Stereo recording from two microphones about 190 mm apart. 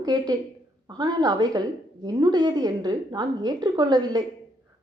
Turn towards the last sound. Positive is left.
turn(degrees=-20)  # may be behind; listen again after turning